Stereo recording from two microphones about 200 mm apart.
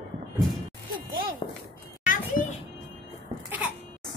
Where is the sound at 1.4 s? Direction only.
30° left (ahead or behind).